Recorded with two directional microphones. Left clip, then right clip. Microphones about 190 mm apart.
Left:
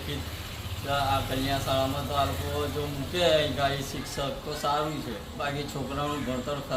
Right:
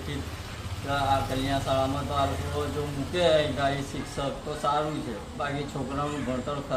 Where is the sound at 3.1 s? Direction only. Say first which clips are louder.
Right 1 dB; centre (ahead or behind).